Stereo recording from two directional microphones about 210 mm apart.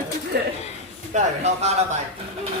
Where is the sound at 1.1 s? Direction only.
30° right (ahead or behind).